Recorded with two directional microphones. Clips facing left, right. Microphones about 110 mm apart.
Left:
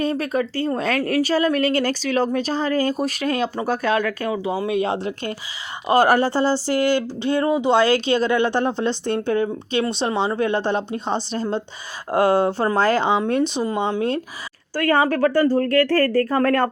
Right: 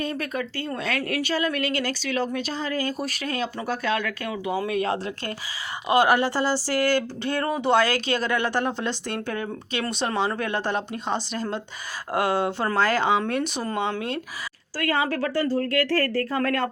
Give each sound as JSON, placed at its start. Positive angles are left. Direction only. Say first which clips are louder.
{"t": 0.0, "sound": "speech", "louder": "left 7 dB", "side_deg": 35}
{"t": 5.9, "sound": "speech", "louder": "left 4 dB", "side_deg": 40}
{"t": 14.8, "sound": "speech", "louder": "left 7 dB", "side_deg": 50}